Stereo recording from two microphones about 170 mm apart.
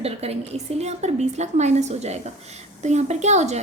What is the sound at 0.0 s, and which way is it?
Speech, 35° right (ahead or behind).